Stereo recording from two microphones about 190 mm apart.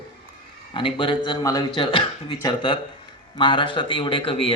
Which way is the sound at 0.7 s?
25° left (ahead or behind).